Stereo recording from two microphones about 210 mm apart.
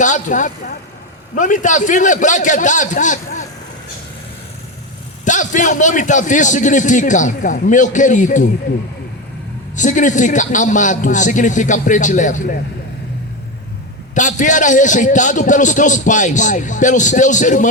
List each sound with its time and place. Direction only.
0.0 s a man's voice: 35° left (ahead or behind)
5.2 s a man's voice: 35° left (ahead or behind)
9.7 s a man's voice: 35° left (ahead or behind)
14.2 s a man's voice: 35° left (ahead or behind)